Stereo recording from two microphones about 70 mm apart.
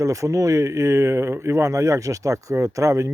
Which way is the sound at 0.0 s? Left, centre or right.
Right.